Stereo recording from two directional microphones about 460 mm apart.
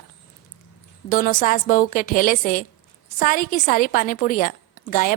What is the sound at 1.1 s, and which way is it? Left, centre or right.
A woman's voice, centre.